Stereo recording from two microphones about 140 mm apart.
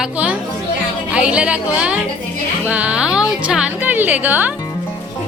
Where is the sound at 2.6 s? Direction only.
10° right (ahead or behind).